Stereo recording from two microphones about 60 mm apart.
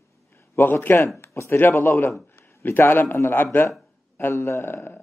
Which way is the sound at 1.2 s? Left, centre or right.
Left.